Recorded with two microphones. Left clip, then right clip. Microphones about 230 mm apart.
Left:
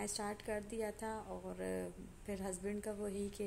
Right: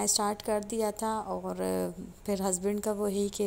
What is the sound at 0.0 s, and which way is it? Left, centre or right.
A woman's voice, right.